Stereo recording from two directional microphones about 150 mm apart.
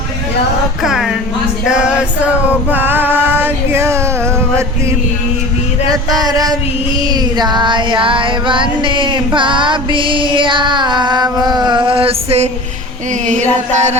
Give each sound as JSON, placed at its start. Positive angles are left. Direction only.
{"t": 0.8, "sound": "mantra", "side_deg": 0}
{"t": 1.6, "sound": "male singing", "side_deg": -5}
{"t": 5.9, "sound": "music", "side_deg": -25}
{"t": 13.2, "sound": "a sound", "side_deg": -55}